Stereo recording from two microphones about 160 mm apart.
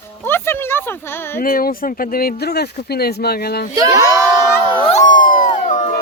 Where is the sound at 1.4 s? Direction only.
65° left (ahead or behind); by 3.6 s 80° left.